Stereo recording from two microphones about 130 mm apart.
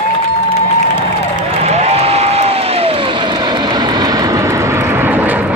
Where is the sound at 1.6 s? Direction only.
55° right (ahead or behind).